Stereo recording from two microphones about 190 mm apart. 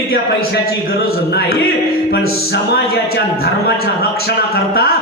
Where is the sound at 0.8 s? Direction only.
55° left (ahead or behind).